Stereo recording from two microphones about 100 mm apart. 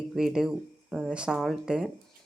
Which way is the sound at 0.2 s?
5° right (ahead or behind).